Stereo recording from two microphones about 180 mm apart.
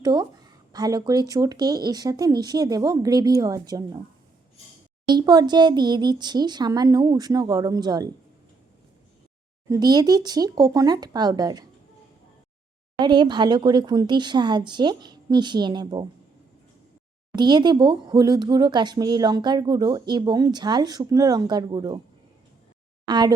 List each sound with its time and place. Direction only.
0.0 s speech: 25° right (ahead or behind)
5.0 s speech: 25° right (ahead or behind)
9.6 s speech: 20° right (ahead or behind)
13.0 s speech: 25° right (ahead or behind)
17.3 s speech: 25° right (ahead or behind)
23.0 s speech: 25° right (ahead or behind)